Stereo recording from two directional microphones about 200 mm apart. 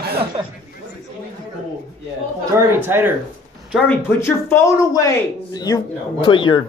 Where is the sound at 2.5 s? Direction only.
15° right (ahead or behind).